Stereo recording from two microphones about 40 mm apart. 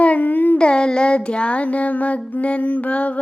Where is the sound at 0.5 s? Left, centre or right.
Left.